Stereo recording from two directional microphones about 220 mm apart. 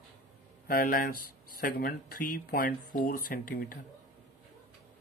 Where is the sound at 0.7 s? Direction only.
40° left (ahead or behind).